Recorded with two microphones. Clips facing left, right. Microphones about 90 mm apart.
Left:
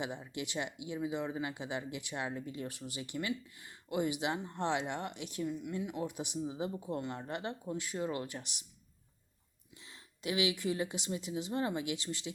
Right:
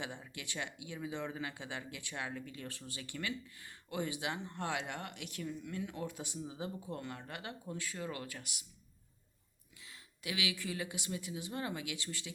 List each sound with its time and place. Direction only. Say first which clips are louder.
0.0 s speech: left 6 dB; 20° left (ahead or behind)
9.8 s speech: left 6 dB; 25° left (ahead or behind)